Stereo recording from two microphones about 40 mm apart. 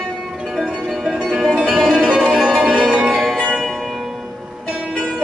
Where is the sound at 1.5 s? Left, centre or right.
Right.